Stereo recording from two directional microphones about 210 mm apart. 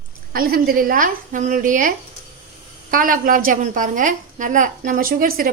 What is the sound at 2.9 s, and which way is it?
A woman's voice, 40° right (ahead or behind).